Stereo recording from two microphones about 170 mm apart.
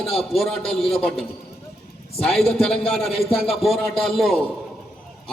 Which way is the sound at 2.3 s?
5° left (ahead or behind).